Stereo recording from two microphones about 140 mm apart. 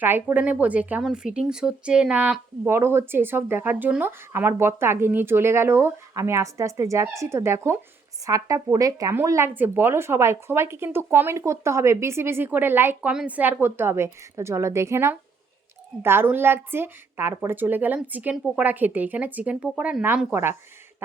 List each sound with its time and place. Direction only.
0.0 s speech: 15° right (ahead or behind)